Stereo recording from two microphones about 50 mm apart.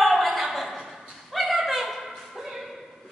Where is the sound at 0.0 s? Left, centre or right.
Centre.